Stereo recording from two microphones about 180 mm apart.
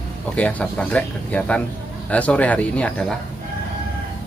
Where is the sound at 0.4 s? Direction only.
10° left (ahead or behind).